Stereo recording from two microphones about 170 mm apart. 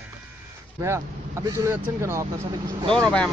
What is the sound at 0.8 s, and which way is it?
Speech, 15° right (ahead or behind).